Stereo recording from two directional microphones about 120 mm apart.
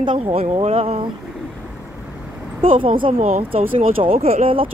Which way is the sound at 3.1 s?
60° right (ahead or behind).